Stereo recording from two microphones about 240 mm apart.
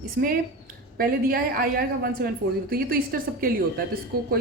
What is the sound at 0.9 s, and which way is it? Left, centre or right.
A woman's voice, right.